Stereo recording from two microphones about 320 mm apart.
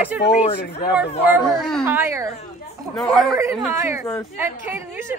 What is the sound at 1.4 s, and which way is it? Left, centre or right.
Speech, centre.